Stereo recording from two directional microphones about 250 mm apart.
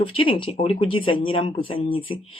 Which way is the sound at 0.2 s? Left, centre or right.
Left.